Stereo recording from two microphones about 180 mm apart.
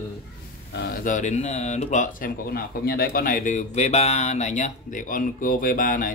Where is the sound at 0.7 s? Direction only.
65° left (ahead or behind).